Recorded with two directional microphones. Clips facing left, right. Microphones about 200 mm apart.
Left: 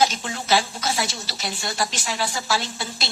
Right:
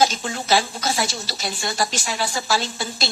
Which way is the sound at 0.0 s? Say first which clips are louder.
Right 2 dB; 40° right (ahead or behind).